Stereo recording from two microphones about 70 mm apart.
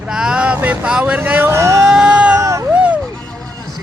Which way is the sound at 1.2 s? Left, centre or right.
Right.